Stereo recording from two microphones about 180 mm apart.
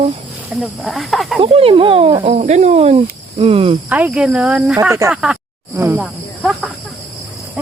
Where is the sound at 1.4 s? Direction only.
30° right (ahead or behind).